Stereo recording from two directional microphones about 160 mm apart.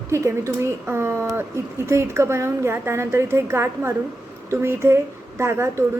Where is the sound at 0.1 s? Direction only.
20° right (ahead or behind).